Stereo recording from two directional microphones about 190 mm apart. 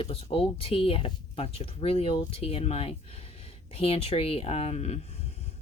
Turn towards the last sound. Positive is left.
turn(degrees=35)  # may be behind; listen again after turning